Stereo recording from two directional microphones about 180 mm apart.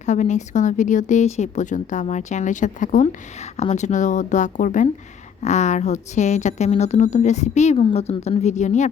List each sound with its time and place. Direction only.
0.0 s speech: 40° left (ahead or behind)